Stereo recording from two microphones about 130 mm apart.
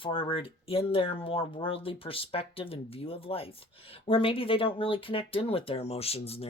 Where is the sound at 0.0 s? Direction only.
45° left (ahead or behind).